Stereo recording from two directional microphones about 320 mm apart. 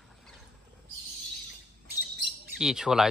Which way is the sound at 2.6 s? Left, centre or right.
Centre.